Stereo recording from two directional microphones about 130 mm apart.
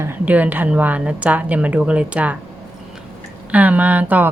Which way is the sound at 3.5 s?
10° right (ahead or behind).